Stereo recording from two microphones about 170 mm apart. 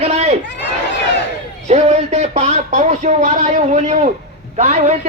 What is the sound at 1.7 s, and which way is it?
Speech, 40° right (ahead or behind).